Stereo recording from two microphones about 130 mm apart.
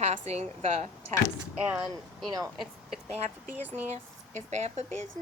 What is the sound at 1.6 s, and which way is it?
Speech, 10° right (ahead or behind).